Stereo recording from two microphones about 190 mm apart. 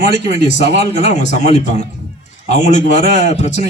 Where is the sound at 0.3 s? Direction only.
35° left (ahead or behind).